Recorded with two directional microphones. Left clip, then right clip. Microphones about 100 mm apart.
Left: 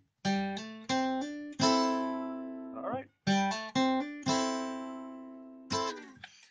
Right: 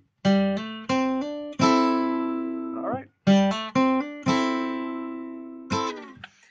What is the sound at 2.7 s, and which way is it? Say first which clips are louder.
Music: right 7 dB; centre (ahead or behind).